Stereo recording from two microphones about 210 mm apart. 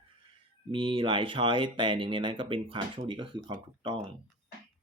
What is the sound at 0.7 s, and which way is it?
Speech, 25° right (ahead or behind).